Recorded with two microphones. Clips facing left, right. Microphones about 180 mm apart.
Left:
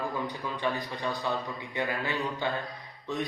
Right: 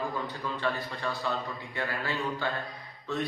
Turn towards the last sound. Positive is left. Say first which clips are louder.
# even
turn(degrees=15)  # may be behind; listen again after turning